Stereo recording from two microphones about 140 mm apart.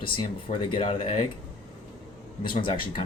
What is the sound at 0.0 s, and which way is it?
Speech, 40° left (ahead or behind).